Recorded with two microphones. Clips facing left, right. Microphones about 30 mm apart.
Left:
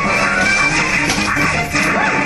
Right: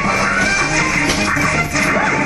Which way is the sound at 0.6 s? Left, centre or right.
Left.